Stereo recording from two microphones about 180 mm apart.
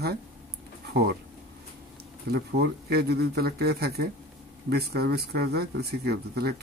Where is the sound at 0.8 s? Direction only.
65° right (ahead or behind).